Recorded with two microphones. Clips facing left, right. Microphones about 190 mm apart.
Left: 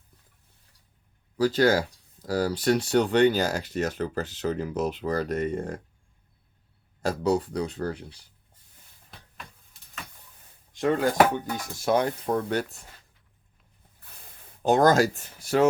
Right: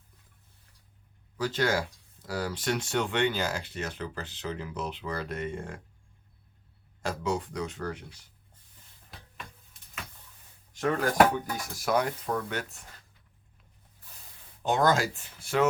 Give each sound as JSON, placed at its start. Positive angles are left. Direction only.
{"t": 1.4, "sound": "speech", "side_deg": 35}
{"t": 7.0, "sound": "speech", "side_deg": 35}
{"t": 10.8, "sound": "speech", "side_deg": 25}
{"t": 14.6, "sound": "speech", "side_deg": 40}